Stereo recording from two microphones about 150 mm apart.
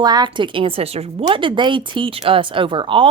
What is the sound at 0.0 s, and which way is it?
Speech, 30° right (ahead or behind).